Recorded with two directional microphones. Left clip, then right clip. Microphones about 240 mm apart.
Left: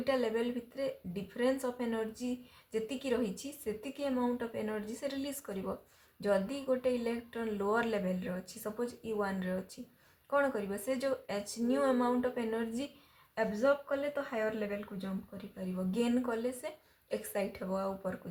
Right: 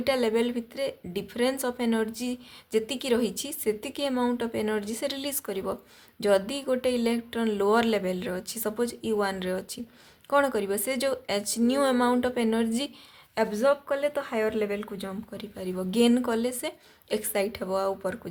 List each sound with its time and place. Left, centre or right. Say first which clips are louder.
0.0 s speech: right 7 dB; right